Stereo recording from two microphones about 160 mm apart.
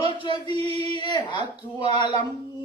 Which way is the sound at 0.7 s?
30° left (ahead or behind).